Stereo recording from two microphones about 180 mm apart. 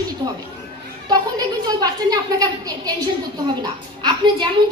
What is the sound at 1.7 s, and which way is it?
A woman's voice, 20° right (ahead or behind).